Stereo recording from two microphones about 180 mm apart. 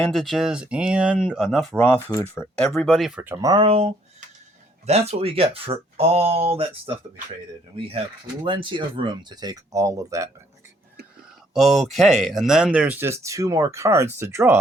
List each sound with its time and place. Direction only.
0.0 s speech: centre (ahead or behind)
2.8 s speech: centre (ahead or behind)
3.2 s speech: 20° right (ahead or behind)
8.4 s speech: 25° right (ahead or behind)
11.5 s speech: centre (ahead or behind)